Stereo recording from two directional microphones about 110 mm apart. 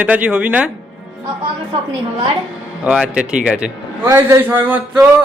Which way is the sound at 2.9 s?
10° right (ahead or behind).